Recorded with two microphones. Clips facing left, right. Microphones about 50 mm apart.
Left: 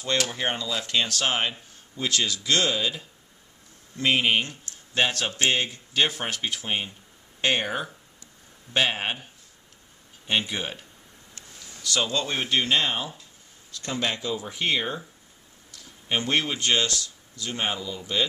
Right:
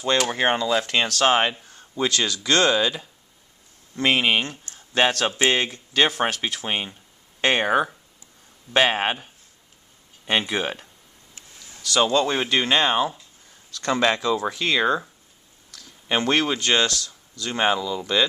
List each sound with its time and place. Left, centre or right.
0.3 s speech: right
1.2 s speech: right
4.9 s speech: right
5.5 s speech: right
5.9 s speech: right
10.2 s speech: right
12.1 s speech: right
13.7 s speech: right